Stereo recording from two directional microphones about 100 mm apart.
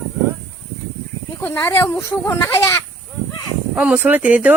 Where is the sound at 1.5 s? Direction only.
30° left (ahead or behind).